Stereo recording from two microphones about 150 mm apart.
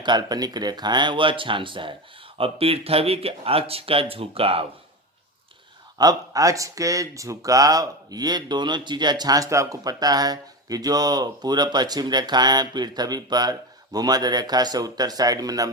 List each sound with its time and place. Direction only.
0.0 s speech: 30° right (ahead or behind)
6.0 s speech: 25° right (ahead or behind)